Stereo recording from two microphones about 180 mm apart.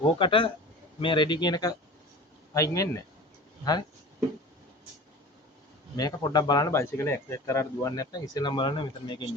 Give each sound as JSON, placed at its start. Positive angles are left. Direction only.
{"t": 0.2, "sound": "speech", "side_deg": 30}
{"t": 6.0, "sound": "speech", "side_deg": 20}